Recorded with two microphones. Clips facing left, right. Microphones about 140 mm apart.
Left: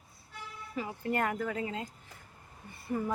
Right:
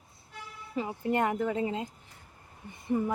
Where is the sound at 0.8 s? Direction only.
20° right (ahead or behind).